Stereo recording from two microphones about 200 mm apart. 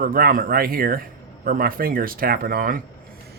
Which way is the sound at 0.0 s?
45° right (ahead or behind).